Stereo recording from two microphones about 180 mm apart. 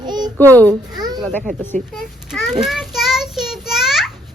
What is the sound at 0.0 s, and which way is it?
Babbling, 25° right (ahead or behind).